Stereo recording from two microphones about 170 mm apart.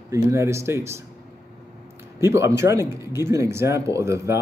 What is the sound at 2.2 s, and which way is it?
Speech, 15° right (ahead or behind).